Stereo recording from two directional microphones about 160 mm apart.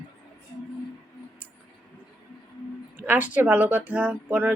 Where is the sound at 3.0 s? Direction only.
10° right (ahead or behind).